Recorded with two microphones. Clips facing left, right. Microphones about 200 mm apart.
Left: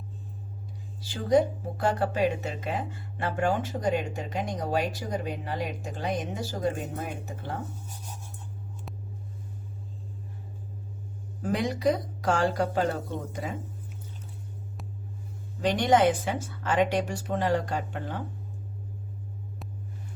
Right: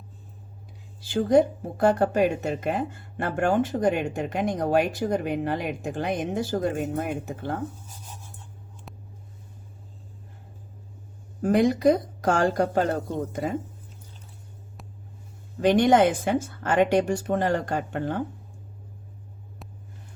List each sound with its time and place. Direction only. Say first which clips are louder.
1.1 s speech: right 4 dB; 55° right (ahead or behind)
11.4 s a woman's voice: right 7 dB; 50° right (ahead or behind)
15.6 s a woman's voice: right 4 dB; 55° right (ahead or behind)